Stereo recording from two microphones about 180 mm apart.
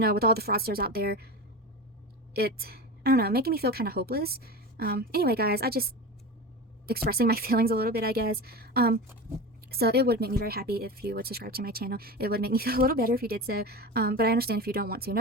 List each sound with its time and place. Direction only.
0.0 s speech: 60° right (ahead or behind)
2.3 s speech: 60° right (ahead or behind)